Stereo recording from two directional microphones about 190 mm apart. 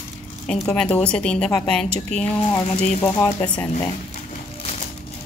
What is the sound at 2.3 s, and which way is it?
Speech, 25° left (ahead or behind).